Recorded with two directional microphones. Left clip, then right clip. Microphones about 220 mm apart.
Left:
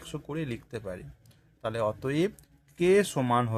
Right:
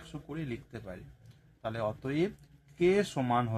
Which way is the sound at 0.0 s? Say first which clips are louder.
Left 6 dB; 45° left (ahead or behind).